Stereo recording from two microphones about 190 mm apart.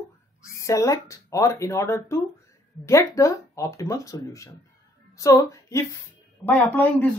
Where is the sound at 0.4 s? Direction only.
15° left (ahead or behind).